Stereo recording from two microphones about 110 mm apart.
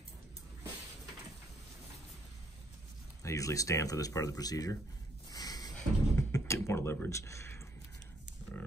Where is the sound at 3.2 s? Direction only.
30° left (ahead or behind).